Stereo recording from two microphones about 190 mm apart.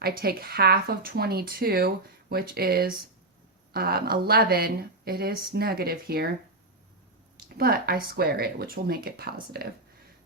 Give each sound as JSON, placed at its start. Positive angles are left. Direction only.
{"t": 0.0, "sound": "speech", "side_deg": -55}
{"t": 7.5, "sound": "speech", "side_deg": -55}